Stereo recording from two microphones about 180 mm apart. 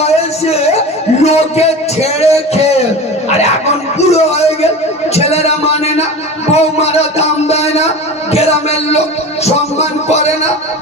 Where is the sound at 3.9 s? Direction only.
35° left (ahead or behind).